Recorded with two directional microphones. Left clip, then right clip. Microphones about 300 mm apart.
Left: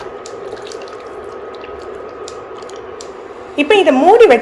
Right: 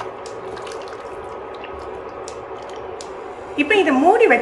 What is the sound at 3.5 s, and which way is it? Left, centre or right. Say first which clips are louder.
Speech: left 6 dB; centre.